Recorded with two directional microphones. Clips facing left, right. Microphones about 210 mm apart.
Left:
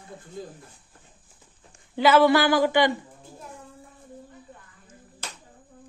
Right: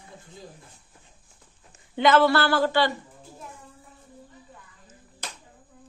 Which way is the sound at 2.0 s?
10° left (ahead or behind).